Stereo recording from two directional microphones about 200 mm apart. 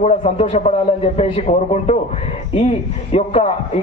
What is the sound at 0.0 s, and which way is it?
A man's voice, 35° left (ahead or behind).